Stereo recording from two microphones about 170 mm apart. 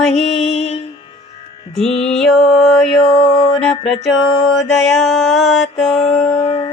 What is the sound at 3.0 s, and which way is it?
Music, 30° left (ahead or behind).